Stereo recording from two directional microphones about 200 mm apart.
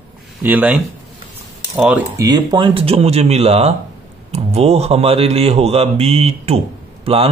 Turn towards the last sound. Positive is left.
turn(degrees=-30)  # may be behind; listen again after turning